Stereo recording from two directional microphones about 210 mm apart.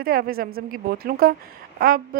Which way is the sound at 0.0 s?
45° right (ahead or behind).